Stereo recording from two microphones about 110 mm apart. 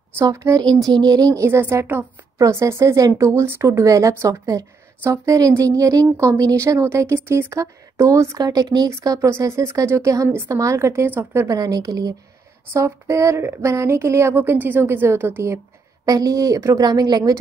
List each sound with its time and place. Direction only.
0.2 s a woman's voice: 30° right (ahead or behind)
11.5 s a woman's voice: 35° right (ahead or behind)